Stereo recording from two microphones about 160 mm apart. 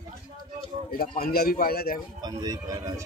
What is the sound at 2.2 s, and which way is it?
Speech, 25° right (ahead or behind).